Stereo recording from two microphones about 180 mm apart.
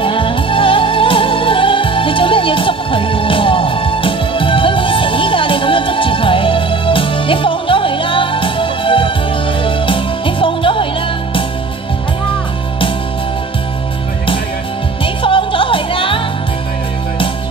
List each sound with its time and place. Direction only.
0.0 s music: 30° left (ahead or behind)
15.2 s music: 30° left (ahead or behind)